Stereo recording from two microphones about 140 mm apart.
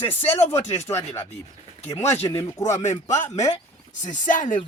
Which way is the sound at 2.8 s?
55° left (ahead or behind).